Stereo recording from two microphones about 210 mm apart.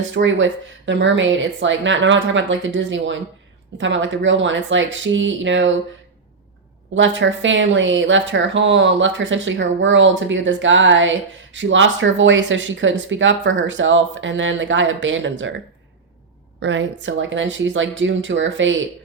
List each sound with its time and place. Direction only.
0.1 s speech: 60° right (ahead or behind)
6.9 s a woman's voice: 60° right (ahead or behind)